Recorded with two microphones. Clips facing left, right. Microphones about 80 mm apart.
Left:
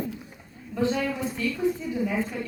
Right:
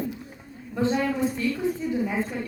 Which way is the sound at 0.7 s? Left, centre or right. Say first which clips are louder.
Right 1 dB; right.